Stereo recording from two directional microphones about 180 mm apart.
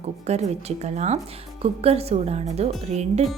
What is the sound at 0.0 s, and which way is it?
Speech, 40° right (ahead or behind).